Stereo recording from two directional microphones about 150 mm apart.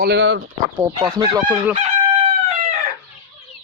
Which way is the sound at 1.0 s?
25° right (ahead or behind).